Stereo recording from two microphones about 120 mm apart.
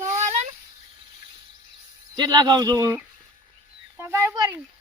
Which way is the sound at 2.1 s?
35° right (ahead or behind).